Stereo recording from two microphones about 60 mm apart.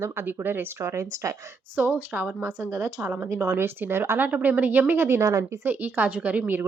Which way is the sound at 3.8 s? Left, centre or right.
Right.